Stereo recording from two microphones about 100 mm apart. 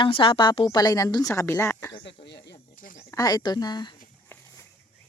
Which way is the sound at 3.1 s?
40° left (ahead or behind).